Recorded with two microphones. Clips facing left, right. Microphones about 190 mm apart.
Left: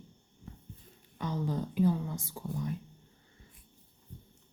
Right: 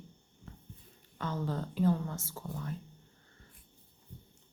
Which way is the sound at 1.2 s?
15° left (ahead or behind).